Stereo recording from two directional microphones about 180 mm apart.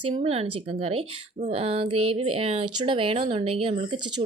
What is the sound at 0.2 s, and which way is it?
A woman's voice, 35° right (ahead or behind).